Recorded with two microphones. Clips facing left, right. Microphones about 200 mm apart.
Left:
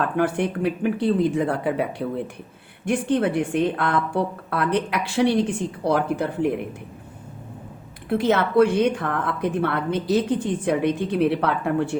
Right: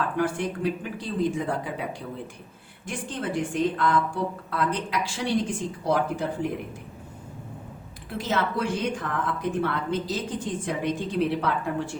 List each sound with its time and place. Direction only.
0.2 s a woman's voice: 65° left (ahead or behind)
8.1 s a woman's voice: 60° left (ahead or behind)